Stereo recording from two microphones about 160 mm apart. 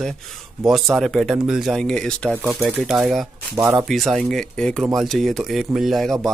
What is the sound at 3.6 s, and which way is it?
Speech, 15° right (ahead or behind).